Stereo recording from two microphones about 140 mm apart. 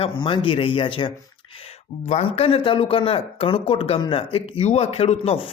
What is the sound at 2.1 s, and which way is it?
Speech, 45° left (ahead or behind).